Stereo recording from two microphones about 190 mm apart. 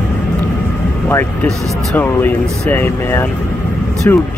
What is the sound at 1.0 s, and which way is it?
Speech, 10° left (ahead or behind).